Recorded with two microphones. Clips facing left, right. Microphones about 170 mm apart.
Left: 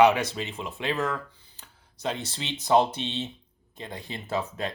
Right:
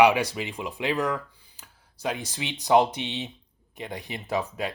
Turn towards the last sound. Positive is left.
turn(degrees=-15)  # may be behind; listen again after turning